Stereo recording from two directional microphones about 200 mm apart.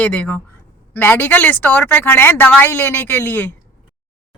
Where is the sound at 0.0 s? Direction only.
10° left (ahead or behind).